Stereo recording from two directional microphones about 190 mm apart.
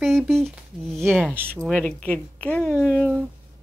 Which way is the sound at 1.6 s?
5° left (ahead or behind).